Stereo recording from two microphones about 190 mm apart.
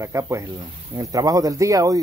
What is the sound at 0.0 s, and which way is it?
Speech, 15° right (ahead or behind).